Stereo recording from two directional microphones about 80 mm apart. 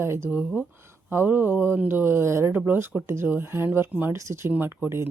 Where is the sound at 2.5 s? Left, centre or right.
Right.